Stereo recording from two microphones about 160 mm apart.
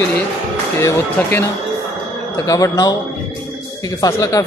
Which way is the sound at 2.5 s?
20° left (ahead or behind).